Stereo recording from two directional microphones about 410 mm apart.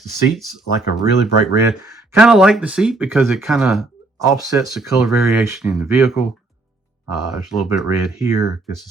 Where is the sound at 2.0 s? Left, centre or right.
Centre.